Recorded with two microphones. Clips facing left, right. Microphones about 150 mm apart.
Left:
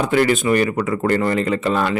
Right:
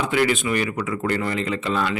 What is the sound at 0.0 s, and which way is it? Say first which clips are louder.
A man's voice: left 4 dB; 45° left (ahead or behind).